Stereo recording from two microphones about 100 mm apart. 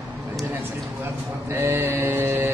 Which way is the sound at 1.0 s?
25° right (ahead or behind).